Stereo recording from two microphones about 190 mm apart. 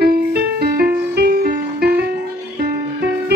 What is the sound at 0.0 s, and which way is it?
Music, 55° right (ahead or behind).